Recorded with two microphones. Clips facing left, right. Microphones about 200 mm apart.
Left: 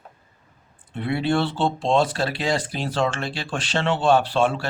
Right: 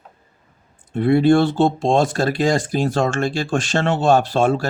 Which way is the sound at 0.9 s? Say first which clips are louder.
Right 9 dB; 45° right (ahead or behind).